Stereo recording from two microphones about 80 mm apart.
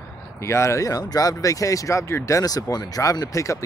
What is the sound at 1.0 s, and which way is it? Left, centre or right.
Speech, left.